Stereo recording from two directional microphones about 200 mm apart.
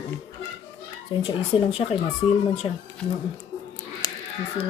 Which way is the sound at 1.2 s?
25° left (ahead or behind).